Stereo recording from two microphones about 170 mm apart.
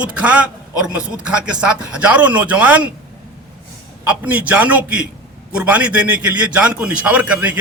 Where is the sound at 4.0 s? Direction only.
10° right (ahead or behind).